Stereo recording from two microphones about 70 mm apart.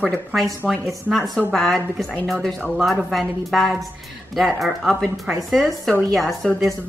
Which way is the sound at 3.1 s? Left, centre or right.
Centre.